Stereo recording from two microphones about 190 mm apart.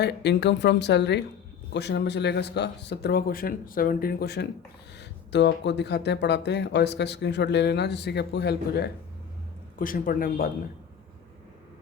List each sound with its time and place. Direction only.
0.0 s speech: 60° left (ahead or behind)
9.7 s speech: 50° left (ahead or behind)